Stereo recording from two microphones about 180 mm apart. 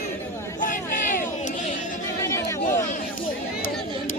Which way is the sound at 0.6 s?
45° left (ahead or behind).